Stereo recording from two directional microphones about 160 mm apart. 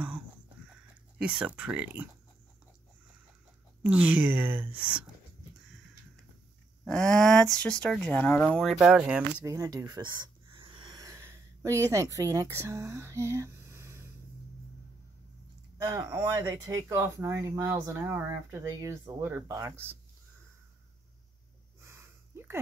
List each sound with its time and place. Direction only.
1.1 s speech: 5° right (ahead or behind)
3.8 s speech: 10° right (ahead or behind)
6.8 s speech: 5° left (ahead or behind)
9.4 s a sound: 20° right (ahead or behind)
15.8 s speech: 20° right (ahead or behind)
21.8 s gasp: 15° right (ahead or behind)